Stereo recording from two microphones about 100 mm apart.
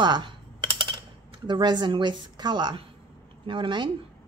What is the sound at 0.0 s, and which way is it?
Speech, 50° right (ahead or behind).